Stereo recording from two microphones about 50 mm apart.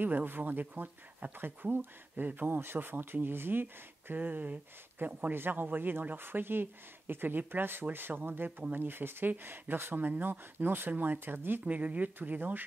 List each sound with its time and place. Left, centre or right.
0.0 s speech: right
11.6 s speech: right